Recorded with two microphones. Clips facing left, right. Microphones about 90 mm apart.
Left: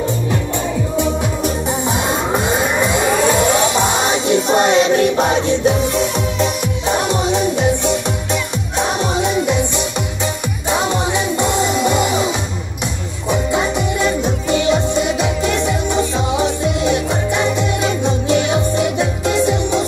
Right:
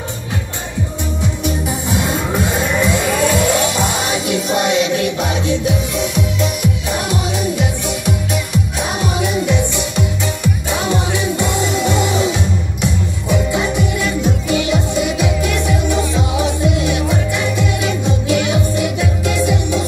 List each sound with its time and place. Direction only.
1.7 s music: 25° left (ahead or behind)